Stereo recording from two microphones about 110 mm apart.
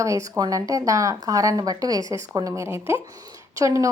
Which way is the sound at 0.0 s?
30° right (ahead or behind).